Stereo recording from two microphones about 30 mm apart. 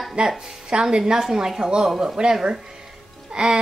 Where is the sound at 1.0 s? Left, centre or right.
Right.